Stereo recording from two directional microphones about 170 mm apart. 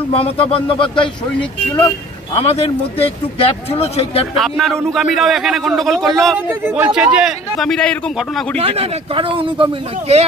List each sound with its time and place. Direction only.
0.1 s a man's voice: 35° left (ahead or behind)
2.3 s a man's voice: 35° left (ahead or behind)
4.4 s a man's voice: centre (ahead or behind)
6.3 s a man's voice: 10° right (ahead or behind)
8.5 s speech: 35° right (ahead or behind)